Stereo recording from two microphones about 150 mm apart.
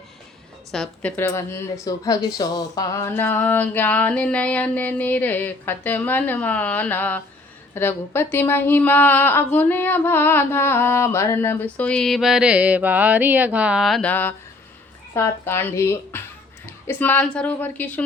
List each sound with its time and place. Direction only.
0.7 s a woman's voice: centre (ahead or behind)
1.1 s speech: 20° left (ahead or behind); by 14.1 s centre (ahead or behind)
14.1 s speech: 10° left (ahead or behind)